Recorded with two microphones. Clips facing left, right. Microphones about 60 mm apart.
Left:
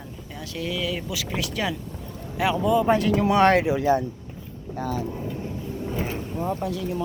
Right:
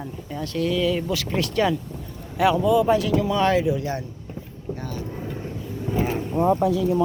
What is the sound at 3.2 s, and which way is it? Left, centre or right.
Speech, left.